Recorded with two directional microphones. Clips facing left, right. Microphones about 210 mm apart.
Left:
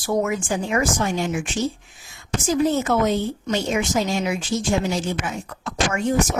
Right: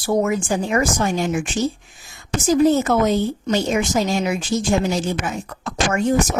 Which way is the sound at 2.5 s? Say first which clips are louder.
Right 4 dB; 40° right (ahead or behind).